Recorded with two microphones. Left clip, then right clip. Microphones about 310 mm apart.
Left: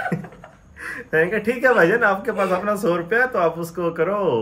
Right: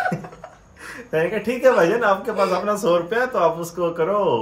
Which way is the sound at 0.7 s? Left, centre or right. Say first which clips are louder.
Left 3 dB; centre.